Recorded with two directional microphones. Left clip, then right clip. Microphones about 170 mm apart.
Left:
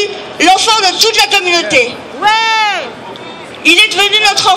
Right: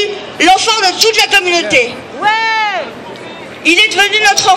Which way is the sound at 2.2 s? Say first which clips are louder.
Left 2 dB; 40° left (ahead or behind).